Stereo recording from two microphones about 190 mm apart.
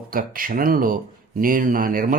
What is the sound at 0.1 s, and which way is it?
Speech, 50° right (ahead or behind).